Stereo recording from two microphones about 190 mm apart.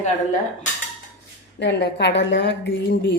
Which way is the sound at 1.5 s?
65° left (ahead or behind).